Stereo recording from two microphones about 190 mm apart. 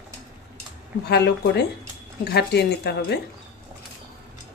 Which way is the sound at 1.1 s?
60° left (ahead or behind).